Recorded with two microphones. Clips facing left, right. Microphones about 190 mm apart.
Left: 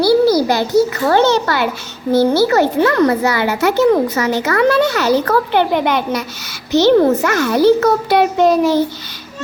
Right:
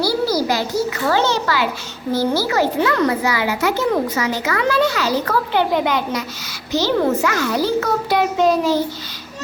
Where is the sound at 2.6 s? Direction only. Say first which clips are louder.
Left 4 dB; 45° left (ahead or behind).